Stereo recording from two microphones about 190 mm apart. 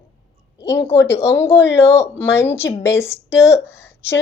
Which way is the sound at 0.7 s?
15° left (ahead or behind).